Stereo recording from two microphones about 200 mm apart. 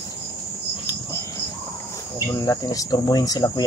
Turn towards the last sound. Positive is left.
turn(degrees=20)  # may be behind; listen again after turning